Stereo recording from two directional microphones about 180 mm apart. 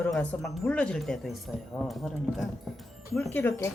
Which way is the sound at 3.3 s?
15° left (ahead or behind).